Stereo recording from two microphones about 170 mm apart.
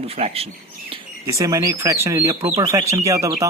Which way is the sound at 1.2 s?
20° right (ahead or behind).